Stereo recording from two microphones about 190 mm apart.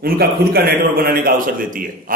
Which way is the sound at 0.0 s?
50° right (ahead or behind).